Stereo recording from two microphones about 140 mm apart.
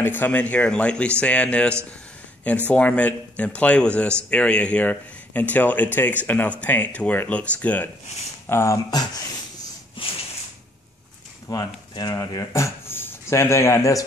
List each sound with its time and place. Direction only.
0.0 s speech: 15° left (ahead or behind)
8.5 s a sound: 20° left (ahead or behind)
11.5 s speech: 25° left (ahead or behind)